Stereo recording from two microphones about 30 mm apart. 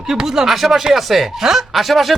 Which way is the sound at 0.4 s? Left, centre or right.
Centre.